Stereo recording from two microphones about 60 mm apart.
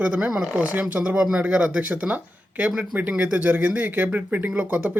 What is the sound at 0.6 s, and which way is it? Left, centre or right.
Speech, right.